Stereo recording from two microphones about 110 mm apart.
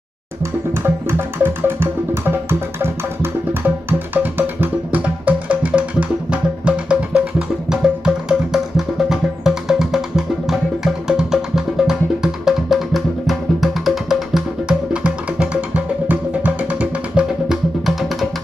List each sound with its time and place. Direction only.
0.4 s music: 20° right (ahead or behind); by 18.3 s centre (ahead or behind)